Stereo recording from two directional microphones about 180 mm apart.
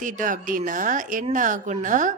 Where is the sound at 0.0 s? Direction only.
45° right (ahead or behind).